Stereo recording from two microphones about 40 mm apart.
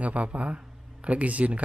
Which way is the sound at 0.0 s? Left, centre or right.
Right.